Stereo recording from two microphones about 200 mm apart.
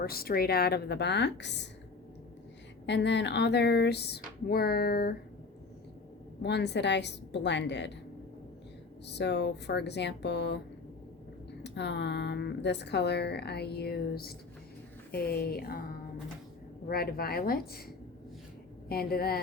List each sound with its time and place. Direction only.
0.0 s speech: 50° left (ahead or behind)
2.8 s speech: 60° left (ahead or behind)
6.4 s speech: 60° left (ahead or behind)
9.0 s speech: 60° left (ahead or behind)
11.6 s speech: 60° left (ahead or behind)
16.9 s speech: 50° left (ahead or behind)
18.9 s speech: 50° left (ahead or behind)